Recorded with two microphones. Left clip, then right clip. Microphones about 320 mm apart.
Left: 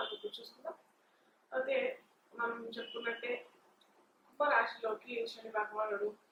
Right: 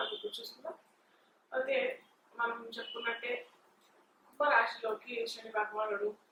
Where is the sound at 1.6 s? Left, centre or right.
Centre.